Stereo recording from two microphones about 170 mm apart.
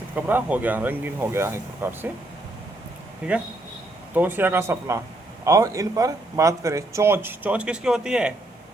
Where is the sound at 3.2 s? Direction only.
5° right (ahead or behind).